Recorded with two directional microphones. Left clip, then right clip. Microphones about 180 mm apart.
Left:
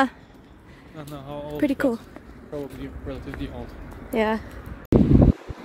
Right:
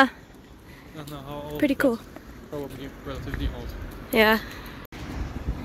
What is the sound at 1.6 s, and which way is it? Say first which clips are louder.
Speech: right 1 dB; 15° left (ahead or behind).